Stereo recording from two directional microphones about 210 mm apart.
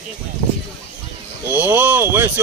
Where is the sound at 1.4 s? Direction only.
10° right (ahead or behind).